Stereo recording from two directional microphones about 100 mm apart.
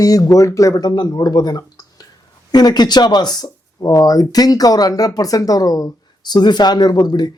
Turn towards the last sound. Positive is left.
turn(degrees=45)  # may be behind; listen again after turning